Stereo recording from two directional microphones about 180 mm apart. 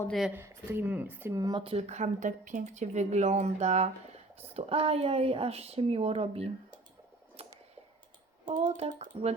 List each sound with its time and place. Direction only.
0.1 s speech: centre (ahead or behind)
0.3 s speech: 10° right (ahead or behind); by 6.5 s 35° right (ahead or behind)
8.6 s speech: 35° right (ahead or behind)